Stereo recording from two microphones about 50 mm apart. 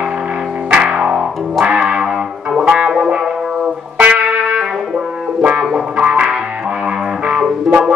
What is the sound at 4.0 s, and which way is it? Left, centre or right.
Music, right.